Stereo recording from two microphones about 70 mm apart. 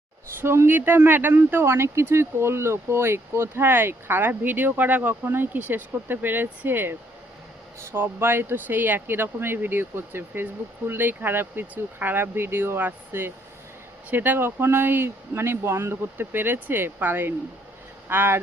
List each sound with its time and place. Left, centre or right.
0.4 s speech: right